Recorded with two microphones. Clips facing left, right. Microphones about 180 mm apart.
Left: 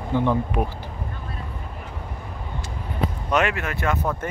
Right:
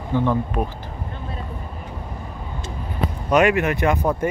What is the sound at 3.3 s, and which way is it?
Speech, 15° right (ahead or behind).